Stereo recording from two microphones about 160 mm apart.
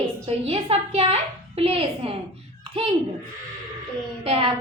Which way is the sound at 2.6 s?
35° right (ahead or behind).